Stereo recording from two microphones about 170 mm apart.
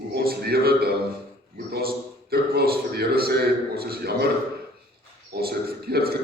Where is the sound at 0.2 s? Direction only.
65° right (ahead or behind).